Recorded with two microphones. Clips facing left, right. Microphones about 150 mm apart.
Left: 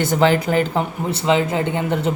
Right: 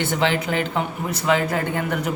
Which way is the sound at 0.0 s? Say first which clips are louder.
Left 5 dB; 40° left (ahead or behind).